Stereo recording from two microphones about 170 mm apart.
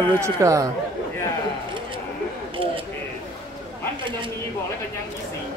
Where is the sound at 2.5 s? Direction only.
30° right (ahead or behind).